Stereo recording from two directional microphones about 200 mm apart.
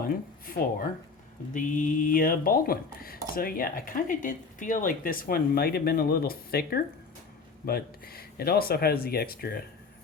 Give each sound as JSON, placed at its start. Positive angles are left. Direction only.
{"t": 0.0, "sound": "speech", "side_deg": 45}